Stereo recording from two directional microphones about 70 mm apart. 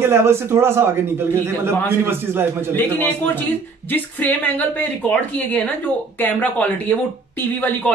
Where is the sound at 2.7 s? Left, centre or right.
Left.